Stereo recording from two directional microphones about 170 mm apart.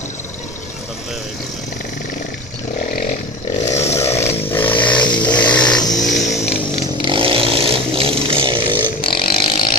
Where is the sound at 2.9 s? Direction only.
60° left (ahead or behind).